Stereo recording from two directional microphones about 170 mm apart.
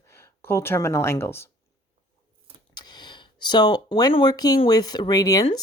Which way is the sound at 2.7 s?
25° left (ahead or behind).